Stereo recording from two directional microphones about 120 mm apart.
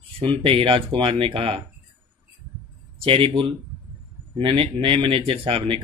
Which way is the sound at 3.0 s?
50° right (ahead or behind).